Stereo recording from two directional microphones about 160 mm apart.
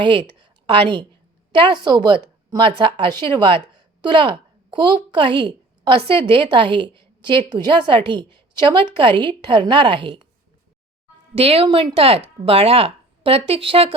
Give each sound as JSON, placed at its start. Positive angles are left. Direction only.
{"t": 0.0, "sound": "a woman's voice", "side_deg": -30}
{"t": 11.3, "sound": "a woman's voice", "side_deg": -35}